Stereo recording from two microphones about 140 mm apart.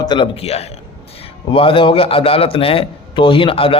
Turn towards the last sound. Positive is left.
turn(degrees=40)  # may be behind; listen again after turning